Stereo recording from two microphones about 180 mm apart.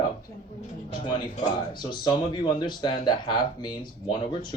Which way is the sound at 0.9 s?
25° left (ahead or behind).